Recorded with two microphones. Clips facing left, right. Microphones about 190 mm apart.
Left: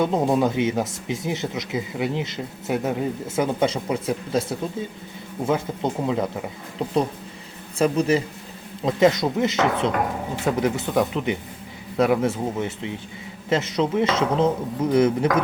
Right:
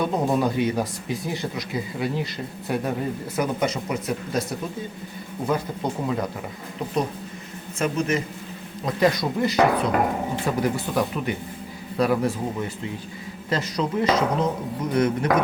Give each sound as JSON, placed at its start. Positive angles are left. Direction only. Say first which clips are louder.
{"t": 0.0, "sound": "speech", "louder": "left 2 dB", "side_deg": 20}
{"t": 7.8, "sound": "a man's voice", "louder": "left 4 dB", "side_deg": 35}
{"t": 8.8, "sound": "speech", "louder": "left 3 dB", "side_deg": 20}